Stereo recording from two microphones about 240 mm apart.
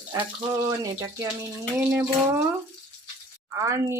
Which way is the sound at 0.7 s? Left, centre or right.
Centre.